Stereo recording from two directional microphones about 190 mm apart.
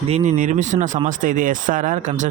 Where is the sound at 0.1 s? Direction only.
40° right (ahead or behind).